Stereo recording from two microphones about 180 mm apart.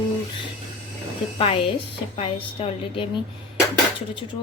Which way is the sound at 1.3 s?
30° left (ahead or behind).